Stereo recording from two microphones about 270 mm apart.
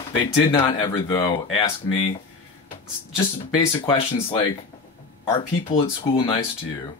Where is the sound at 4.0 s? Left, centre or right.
Left.